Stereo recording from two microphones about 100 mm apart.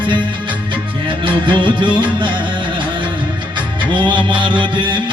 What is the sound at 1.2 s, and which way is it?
Music, 55° right (ahead or behind).